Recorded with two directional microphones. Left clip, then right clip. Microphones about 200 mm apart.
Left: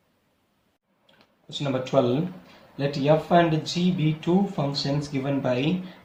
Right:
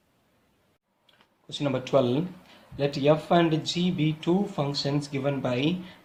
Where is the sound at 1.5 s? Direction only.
50° right (ahead or behind).